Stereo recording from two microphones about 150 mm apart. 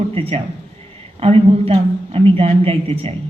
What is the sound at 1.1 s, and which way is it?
A woman's voice, 40° right (ahead or behind).